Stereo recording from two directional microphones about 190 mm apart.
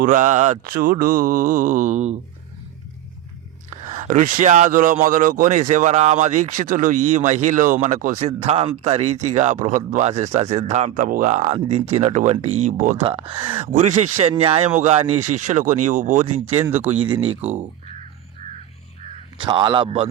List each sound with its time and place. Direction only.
0.0 s mantra: 45° right (ahead or behind)
3.7 s speech: 40° right (ahead or behind)
13.1 s speech: 30° right (ahead or behind)
19.5 s speech: 25° right (ahead or behind)